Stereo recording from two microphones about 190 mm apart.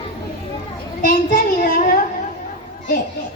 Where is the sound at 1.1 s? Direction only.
50° left (ahead or behind).